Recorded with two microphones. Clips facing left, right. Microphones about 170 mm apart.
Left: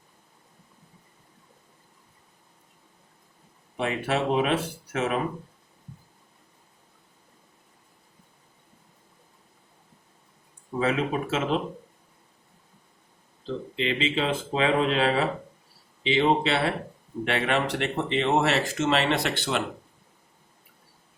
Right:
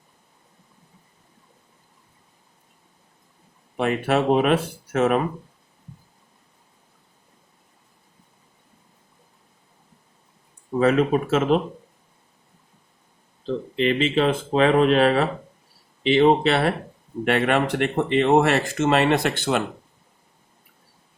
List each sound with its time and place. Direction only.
3.8 s speech: 55° right (ahead or behind)
10.8 s speech: 50° right (ahead or behind)
13.7 s speech: 55° right (ahead or behind)